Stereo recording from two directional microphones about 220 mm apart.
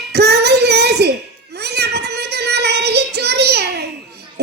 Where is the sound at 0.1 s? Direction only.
50° right (ahead or behind).